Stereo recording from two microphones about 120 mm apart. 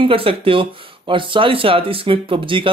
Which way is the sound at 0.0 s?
50° right (ahead or behind).